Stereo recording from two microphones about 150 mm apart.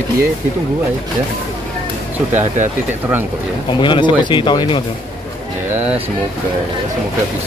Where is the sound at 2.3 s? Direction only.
55° right (ahead or behind).